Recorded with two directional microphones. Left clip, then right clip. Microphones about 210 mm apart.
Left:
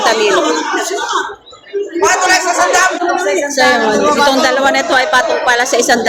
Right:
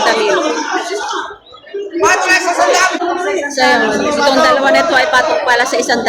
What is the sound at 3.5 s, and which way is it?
Speech, 15° left (ahead or behind).